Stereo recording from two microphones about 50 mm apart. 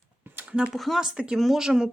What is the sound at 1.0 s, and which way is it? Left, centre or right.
Speech, centre.